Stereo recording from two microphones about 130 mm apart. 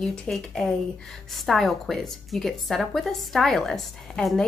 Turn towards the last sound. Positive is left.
turn(degrees=0)  # may be behind; listen again after turning